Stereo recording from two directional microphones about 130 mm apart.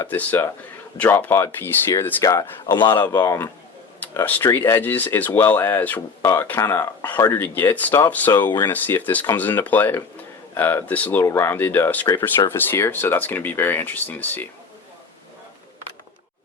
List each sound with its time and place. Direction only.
0.0 s speech: 15° left (ahead or behind); by 2.9 s 35° left (ahead or behind)
2.9 s speech: 20° left (ahead or behind)